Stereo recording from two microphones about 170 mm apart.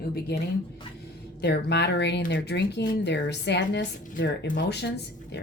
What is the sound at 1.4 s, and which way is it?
Speech, 80° left.